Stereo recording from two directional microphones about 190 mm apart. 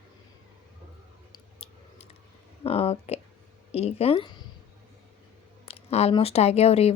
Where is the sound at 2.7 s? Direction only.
30° left (ahead or behind).